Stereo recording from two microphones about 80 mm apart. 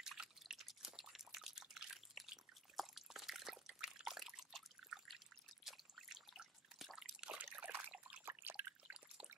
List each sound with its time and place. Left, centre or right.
0.0 s drip: centre
7.0 s water: centre
8.3 s drip: right